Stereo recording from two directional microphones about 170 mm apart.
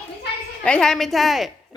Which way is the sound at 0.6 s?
5° left (ahead or behind).